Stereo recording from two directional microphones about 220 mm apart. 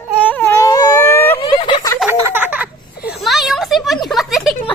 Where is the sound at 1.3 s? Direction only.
25° left (ahead or behind).